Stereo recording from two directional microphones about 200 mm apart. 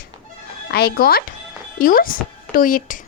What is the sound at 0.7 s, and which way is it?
A woman's voice, 50° left (ahead or behind).